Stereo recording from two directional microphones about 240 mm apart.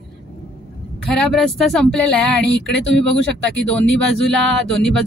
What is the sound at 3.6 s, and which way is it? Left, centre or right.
Speech, centre.